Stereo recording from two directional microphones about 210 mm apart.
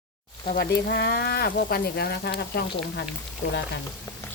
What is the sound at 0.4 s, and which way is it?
Speech, 50° left (ahead or behind).